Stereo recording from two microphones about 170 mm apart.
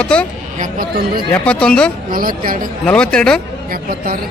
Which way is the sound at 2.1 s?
55° right (ahead or behind).